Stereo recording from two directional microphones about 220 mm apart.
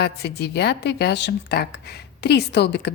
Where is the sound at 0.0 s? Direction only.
50° left (ahead or behind).